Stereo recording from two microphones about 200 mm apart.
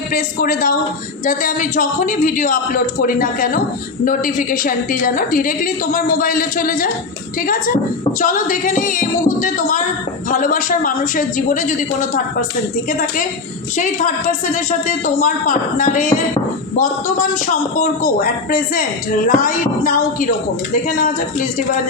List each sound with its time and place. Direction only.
0.1 s a man's voice: 45° left (ahead or behind)
13.7 s a woman's voice: 40° left (ahead or behind)